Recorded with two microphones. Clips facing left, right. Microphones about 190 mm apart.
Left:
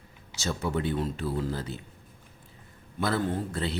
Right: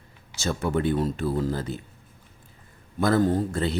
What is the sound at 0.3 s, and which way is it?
A man's voice, 55° right (ahead or behind).